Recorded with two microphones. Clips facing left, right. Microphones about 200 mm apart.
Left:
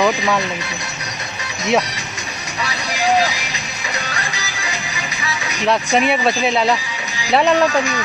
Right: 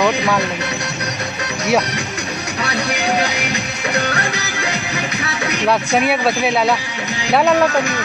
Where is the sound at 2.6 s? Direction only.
60° right (ahead or behind).